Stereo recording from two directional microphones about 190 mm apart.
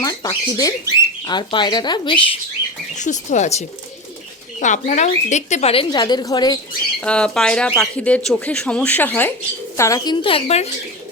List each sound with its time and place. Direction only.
0.0 s speech: 20° left (ahead or behind)
2.9 s speech: 40° left (ahead or behind); by 6.6 s 20° left (ahead or behind)
7.0 s speech: 5° left (ahead or behind); by 10.7 s 30° left (ahead or behind)